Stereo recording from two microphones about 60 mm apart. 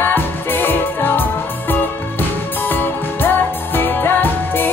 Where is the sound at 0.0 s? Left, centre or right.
Left.